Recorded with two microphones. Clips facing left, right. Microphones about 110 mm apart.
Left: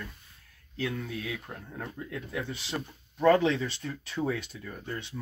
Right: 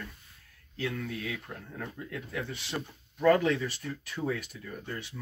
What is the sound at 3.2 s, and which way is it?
Speech, 25° left (ahead or behind).